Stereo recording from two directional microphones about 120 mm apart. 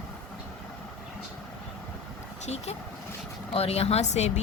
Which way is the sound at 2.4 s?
65° left (ahead or behind).